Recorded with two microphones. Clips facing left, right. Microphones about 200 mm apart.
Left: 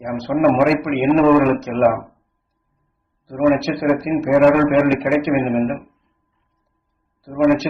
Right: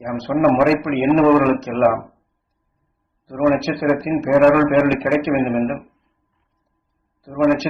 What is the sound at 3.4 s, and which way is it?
A man's voice, centre (ahead or behind).